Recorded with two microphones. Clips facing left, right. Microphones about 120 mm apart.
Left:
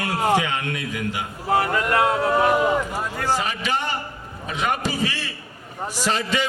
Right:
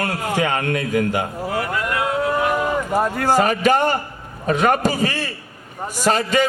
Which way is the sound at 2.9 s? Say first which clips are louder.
Right 7 dB; 50° right (ahead or behind).